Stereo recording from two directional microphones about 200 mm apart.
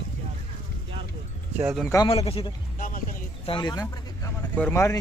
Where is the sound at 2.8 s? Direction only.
45° left (ahead or behind).